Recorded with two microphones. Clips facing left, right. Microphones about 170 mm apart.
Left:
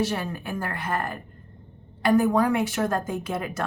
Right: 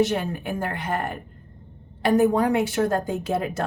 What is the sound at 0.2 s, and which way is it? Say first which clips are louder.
A woman's voice: right 3 dB; 20° right (ahead or behind).